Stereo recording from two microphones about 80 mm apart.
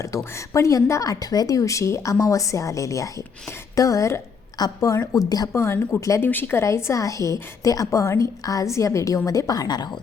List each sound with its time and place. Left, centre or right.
0.3 s a woman's voice: left
5.5 s a woman's voice: left